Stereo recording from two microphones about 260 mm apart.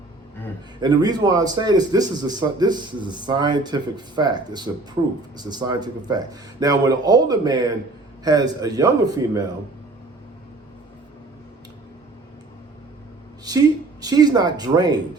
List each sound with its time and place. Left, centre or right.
0.8 s a man's voice: centre
14.0 s a man's voice: centre